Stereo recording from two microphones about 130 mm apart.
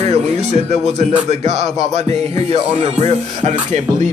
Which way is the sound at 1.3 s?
55° right (ahead or behind).